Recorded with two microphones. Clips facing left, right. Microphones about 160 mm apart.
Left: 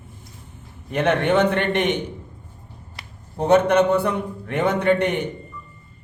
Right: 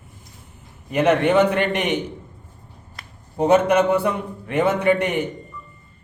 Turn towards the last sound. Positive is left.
turn(degrees=-5)  # may be behind; listen again after turning